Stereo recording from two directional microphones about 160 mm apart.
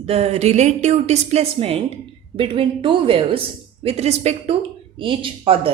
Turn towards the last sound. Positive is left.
turn(degrees=-35)  # may be behind; listen again after turning